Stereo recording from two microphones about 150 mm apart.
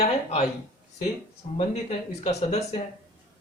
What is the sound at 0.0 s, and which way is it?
Speech, 45° left (ahead or behind).